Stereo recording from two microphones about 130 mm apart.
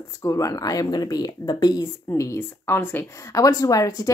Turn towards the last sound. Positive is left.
turn(degrees=25)  # may be behind; listen again after turning